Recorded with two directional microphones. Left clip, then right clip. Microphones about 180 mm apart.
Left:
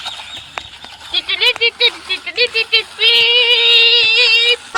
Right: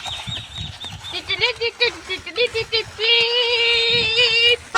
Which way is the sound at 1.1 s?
15° right (ahead or behind).